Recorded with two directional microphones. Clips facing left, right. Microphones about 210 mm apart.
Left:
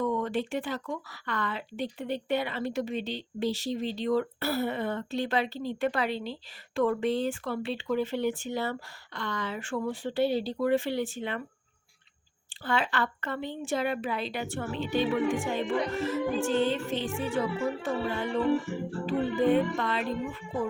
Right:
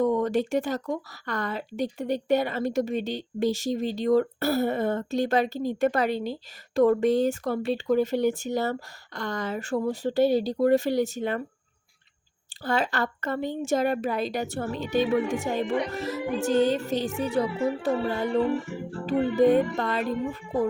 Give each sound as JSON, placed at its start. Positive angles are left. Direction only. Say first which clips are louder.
{"t": 0.0, "sound": "speech", "louder": "right 6 dB", "side_deg": -40}
{"t": 12.5, "sound": "speech", "louder": "right 3 dB", "side_deg": -40}